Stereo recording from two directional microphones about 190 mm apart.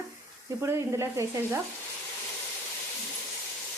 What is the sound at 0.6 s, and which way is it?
Sizzle, 15° right (ahead or behind).